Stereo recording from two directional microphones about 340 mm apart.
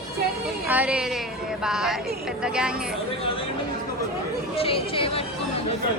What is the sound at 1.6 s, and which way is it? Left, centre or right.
Music, centre.